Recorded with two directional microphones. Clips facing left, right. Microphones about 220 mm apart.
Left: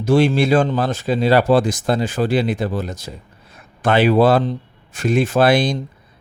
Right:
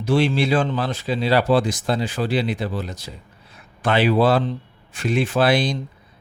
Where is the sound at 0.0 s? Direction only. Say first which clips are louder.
Left 4 dB; 45° left (ahead or behind).